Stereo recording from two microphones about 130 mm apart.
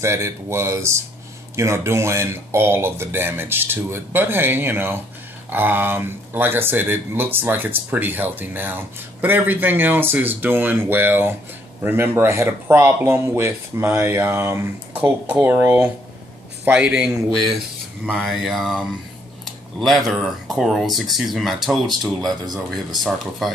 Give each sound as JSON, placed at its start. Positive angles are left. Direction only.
{"t": 0.0, "sound": "speech", "side_deg": -20}